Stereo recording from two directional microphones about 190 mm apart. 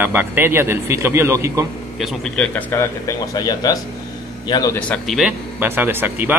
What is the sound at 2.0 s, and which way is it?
A man's voice, 5° left (ahead or behind).